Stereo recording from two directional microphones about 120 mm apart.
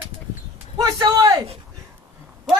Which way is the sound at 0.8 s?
30° right (ahead or behind).